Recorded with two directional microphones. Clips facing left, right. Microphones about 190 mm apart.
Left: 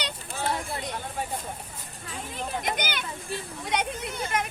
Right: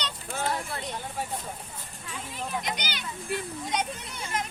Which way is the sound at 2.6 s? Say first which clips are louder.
Left 4 dB; 50° left (ahead or behind).